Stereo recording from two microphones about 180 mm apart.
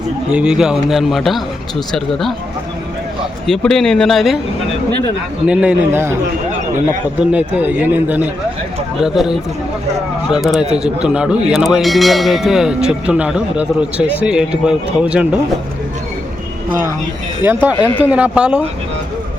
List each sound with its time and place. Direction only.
0.3 s speech: 5° right (ahead or behind)
3.4 s speech: 5° left (ahead or behind)
5.5 s a man's voice: 5° right (ahead or behind)
7.2 s a man's voice: 5° right (ahead or behind)
17.4 s a man's voice: 10° right (ahead or behind)